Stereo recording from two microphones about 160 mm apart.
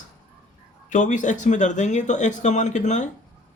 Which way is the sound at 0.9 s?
50° left (ahead or behind).